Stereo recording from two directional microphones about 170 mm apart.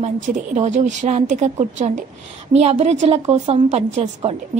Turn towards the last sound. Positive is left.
turn(degrees=-40)  # may be behind; listen again after turning